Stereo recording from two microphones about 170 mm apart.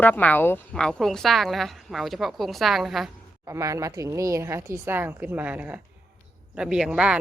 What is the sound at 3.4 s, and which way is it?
A woman's voice, 20° right (ahead or behind).